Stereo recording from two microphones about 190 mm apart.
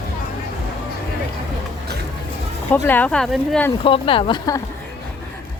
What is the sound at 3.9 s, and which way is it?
Speech, 25° left (ahead or behind).